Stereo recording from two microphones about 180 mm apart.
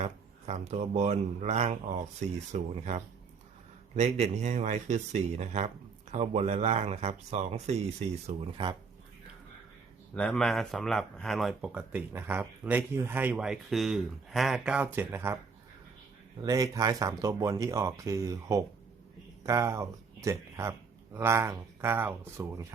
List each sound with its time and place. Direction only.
0.0 s speech: 40° right (ahead or behind)
10.2 s speech: 5° left (ahead or behind); by 15.4 s 15° right (ahead or behind)
16.4 s speech: 20° right (ahead or behind)